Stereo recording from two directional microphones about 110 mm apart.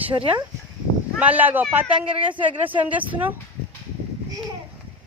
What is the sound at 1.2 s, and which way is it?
Speech, 15° right (ahead or behind).